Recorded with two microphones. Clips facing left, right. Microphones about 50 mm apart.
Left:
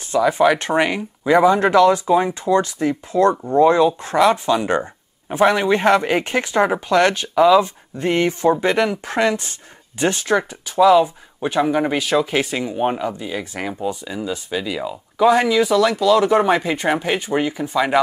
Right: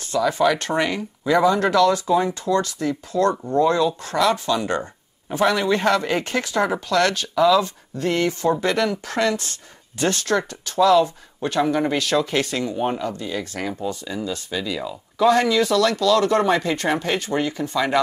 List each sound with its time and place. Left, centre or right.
0.0 s speech: left